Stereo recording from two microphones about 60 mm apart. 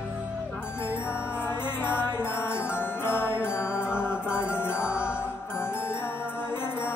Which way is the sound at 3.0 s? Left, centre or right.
Left.